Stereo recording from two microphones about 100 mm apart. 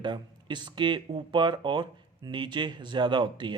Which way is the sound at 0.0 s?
50° right (ahead or behind).